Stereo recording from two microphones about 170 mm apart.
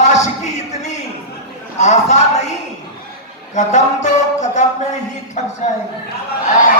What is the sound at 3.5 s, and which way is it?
Speech, 45° left (ahead or behind).